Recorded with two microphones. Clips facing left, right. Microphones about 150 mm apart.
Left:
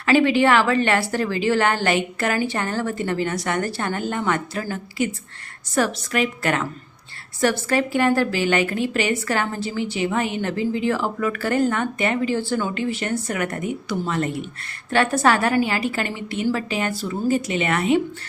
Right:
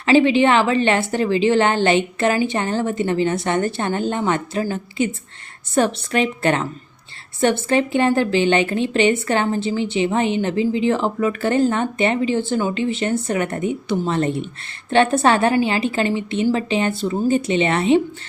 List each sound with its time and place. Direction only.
0.0 s a woman's voice: 20° right (ahead or behind)
7.7 s a woman's voice: 25° right (ahead or behind)